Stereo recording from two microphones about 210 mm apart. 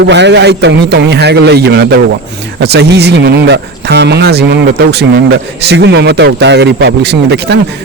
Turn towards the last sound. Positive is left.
turn(degrees=-50)  # may be behind; listen again after turning